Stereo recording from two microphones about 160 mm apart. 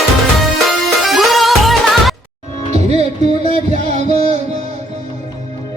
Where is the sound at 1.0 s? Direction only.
Centre (ahead or behind).